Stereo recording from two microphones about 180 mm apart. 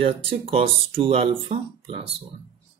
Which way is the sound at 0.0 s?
30° right (ahead or behind).